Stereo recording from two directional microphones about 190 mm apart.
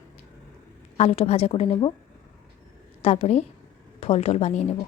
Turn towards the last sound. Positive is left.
turn(degrees=35)  # may be behind; listen again after turning